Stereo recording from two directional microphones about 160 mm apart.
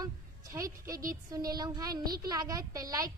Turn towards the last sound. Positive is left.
turn(degrees=-20)  # may be behind; listen again after turning